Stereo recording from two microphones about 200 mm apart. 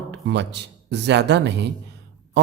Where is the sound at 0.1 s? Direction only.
60° right (ahead or behind).